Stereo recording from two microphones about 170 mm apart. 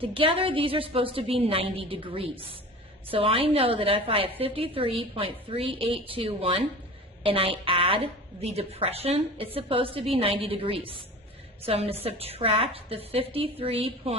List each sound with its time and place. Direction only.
0.0 s a woman's voice: 30° right (ahead or behind)